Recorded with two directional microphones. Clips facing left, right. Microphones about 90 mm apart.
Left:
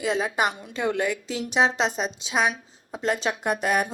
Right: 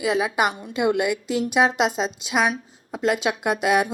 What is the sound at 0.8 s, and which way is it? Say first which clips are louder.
Speech: right 4 dB; 15° right (ahead or behind).